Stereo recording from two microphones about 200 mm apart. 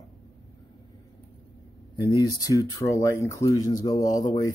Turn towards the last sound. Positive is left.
turn(degrees=20)  # may be behind; listen again after turning